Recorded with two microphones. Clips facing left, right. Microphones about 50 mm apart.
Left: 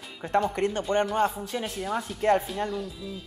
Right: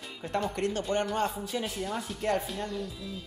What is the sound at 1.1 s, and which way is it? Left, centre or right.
A woman's voice, centre.